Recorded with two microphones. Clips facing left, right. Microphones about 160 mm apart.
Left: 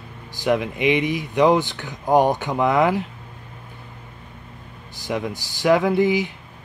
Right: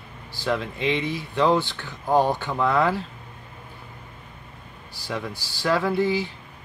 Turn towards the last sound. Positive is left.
turn(degrees=15)  # may be behind; listen again after turning